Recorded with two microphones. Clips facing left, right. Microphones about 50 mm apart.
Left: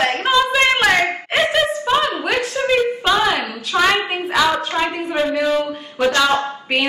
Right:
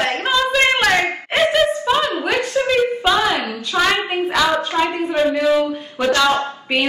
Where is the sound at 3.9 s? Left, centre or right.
Centre.